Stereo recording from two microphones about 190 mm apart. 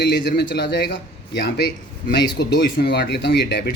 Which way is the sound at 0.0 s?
60° left (ahead or behind).